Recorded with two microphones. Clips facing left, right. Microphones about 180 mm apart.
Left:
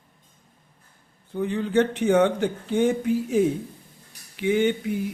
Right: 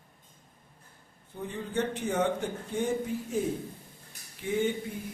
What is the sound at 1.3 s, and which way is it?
Speech, 90° left.